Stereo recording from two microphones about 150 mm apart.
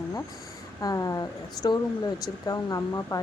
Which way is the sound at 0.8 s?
25° left (ahead or behind).